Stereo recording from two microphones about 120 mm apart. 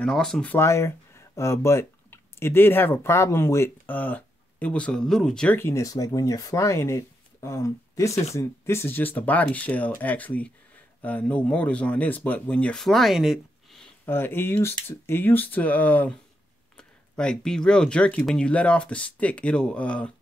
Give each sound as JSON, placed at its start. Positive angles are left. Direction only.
{"t": 0.0, "sound": "speech", "side_deg": 5}
{"t": 0.5, "sound": "speech", "side_deg": 20}
{"t": 5.6, "sound": "speech", "side_deg": 25}
{"t": 14.0, "sound": "speech", "side_deg": 20}